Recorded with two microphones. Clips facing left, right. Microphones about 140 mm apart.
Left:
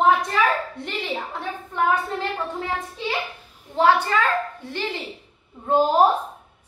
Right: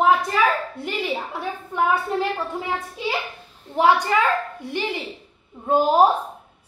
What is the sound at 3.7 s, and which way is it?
A woman's voice, 15° right (ahead or behind).